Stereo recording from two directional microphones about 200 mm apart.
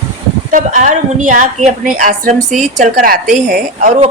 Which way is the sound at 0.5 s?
40° right (ahead or behind).